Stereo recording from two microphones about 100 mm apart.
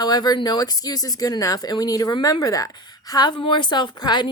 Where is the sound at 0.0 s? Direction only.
45° left (ahead or behind).